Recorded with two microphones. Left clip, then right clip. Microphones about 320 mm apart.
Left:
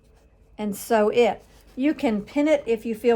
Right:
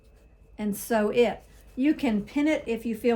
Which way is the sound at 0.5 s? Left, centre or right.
Left.